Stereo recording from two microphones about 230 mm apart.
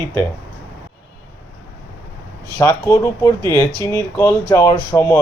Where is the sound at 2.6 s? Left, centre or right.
Centre.